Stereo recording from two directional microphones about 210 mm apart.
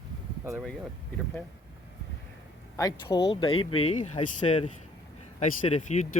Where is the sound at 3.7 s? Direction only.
90° left.